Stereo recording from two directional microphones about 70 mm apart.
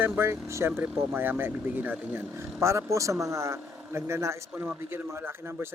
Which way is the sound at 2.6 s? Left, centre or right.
Right.